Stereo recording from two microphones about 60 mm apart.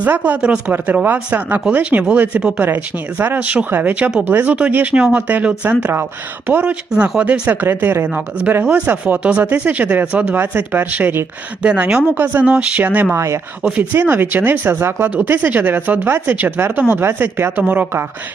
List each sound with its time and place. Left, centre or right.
0.0 s speech: right
3.7 s speech: right
4.7 s speech: right
7.4 s speech: right
11.6 s speech: centre
12.1 s speech: right
12.5 s speech: centre
13.1 s speech: right
13.6 s speech: centre
13.9 s speech: right
15.4 s speech: right
17.6 s speech: right